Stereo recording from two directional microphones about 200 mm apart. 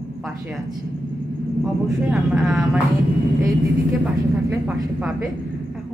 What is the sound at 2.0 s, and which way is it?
Speech, 5° right (ahead or behind).